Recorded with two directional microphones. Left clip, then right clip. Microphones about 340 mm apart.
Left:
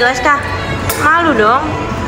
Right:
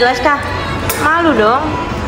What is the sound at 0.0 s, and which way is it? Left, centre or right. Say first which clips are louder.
Speech: even; centre.